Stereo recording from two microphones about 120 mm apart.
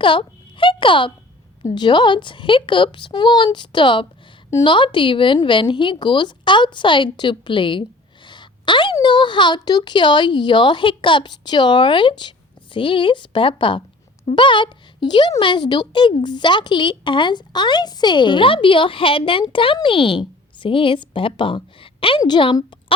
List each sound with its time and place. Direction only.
0.0 s a child's voice: 45° left (ahead or behind)